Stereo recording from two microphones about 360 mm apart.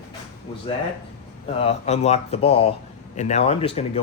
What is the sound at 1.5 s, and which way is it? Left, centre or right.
Speech, centre.